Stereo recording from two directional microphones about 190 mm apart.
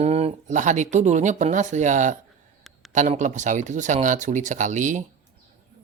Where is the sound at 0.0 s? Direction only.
35° right (ahead or behind).